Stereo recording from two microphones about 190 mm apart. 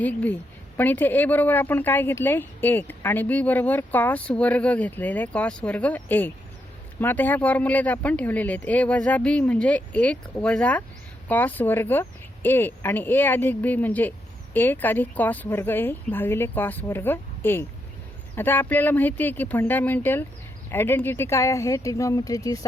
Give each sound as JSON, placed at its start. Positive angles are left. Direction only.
{"t": 0.0, "sound": "speech", "side_deg": 10}